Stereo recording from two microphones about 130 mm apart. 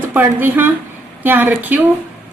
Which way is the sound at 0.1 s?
15° right (ahead or behind).